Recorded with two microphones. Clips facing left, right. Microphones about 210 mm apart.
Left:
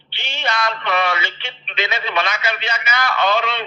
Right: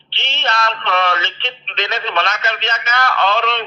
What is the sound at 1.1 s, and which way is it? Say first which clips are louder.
A man's voice: right 2 dB; 10° left (ahead or behind).